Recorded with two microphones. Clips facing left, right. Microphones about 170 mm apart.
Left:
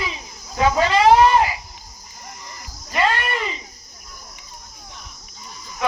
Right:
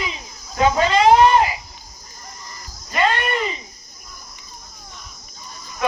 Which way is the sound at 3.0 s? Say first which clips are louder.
Right 1 dB; 20° right (ahead or behind).